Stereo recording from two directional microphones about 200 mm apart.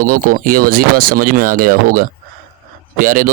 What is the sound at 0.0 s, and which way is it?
Speech, 45° right (ahead or behind).